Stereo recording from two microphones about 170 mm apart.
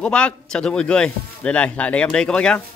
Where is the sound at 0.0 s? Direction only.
5° left (ahead or behind).